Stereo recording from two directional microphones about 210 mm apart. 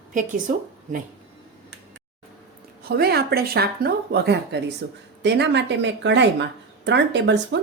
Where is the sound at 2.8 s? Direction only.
50° right (ahead or behind).